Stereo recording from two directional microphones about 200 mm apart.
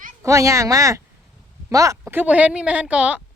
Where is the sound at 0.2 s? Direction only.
15° right (ahead or behind).